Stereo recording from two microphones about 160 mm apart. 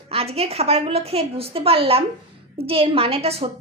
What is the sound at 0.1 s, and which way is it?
A child's voice, 40° right (ahead or behind).